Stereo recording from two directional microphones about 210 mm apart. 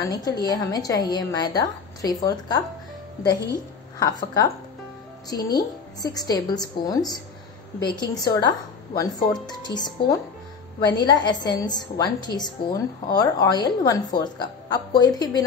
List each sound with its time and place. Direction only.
0.1 s a woman's voice: 20° left (ahead or behind)
4.0 s a woman's voice: 20° left (ahead or behind)